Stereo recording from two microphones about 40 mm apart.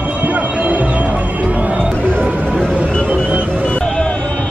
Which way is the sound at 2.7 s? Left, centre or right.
Right.